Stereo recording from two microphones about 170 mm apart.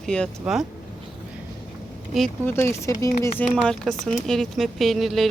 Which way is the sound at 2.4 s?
15° left (ahead or behind).